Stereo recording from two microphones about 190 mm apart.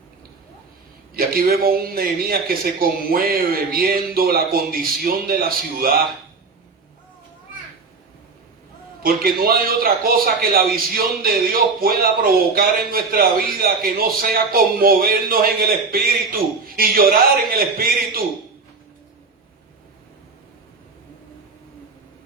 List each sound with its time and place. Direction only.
1.1 s speech: 50° right (ahead or behind)
9.0 s speech: 50° right (ahead or behind)